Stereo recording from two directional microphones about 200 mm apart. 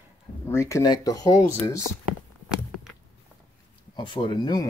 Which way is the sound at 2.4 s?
Centre (ahead or behind).